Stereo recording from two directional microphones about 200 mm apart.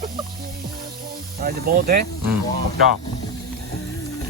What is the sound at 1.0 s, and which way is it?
Speech, 50° right (ahead or behind).